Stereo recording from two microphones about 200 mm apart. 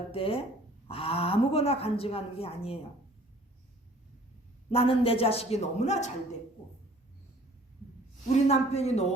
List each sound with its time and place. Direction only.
0.1 s speech: 25° left (ahead or behind)
4.7 s speech: 30° left (ahead or behind)
8.4 s a man's voice: 30° left (ahead or behind)